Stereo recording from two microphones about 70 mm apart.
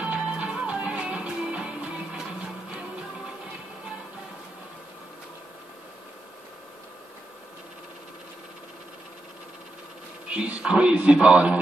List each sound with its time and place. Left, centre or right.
0.0 s music: centre
10.2 s a man's voice: centre